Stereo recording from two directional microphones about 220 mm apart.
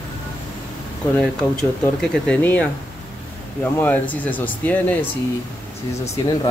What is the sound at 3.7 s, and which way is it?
Speech, 10° left (ahead or behind).